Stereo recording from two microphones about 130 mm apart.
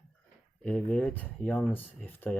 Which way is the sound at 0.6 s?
10° left (ahead or behind).